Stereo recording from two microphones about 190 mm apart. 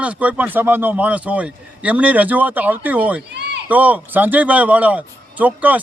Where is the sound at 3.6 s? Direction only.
10° right (ahead or behind).